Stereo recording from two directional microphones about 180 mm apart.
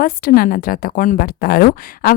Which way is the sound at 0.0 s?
55° left (ahead or behind).